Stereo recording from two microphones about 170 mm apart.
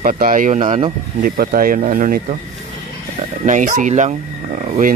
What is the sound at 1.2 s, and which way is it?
Speech, 60° right (ahead or behind).